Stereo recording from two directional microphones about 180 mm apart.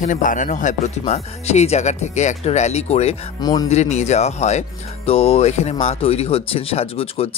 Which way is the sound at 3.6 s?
35° left (ahead or behind).